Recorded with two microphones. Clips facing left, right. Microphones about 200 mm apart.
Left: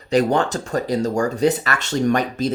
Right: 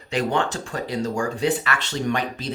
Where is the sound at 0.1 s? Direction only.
40° left (ahead or behind).